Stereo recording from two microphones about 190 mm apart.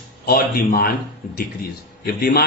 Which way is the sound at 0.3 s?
50° left (ahead or behind).